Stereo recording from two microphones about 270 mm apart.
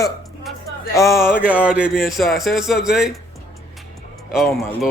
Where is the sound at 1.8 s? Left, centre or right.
Centre.